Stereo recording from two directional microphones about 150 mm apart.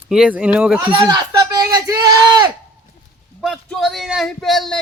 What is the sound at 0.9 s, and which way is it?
Speech, 30° right (ahead or behind).